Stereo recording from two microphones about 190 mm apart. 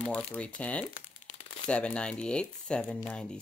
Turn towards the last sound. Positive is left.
turn(degrees=5)  # may be behind; listen again after turning